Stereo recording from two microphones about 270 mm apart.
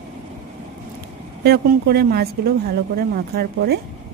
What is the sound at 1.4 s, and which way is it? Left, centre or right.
A woman's voice, right.